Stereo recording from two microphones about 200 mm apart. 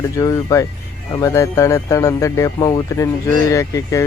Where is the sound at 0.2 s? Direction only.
15° left (ahead or behind).